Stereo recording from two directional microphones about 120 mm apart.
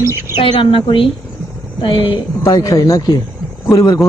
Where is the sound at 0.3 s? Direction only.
45° left (ahead or behind).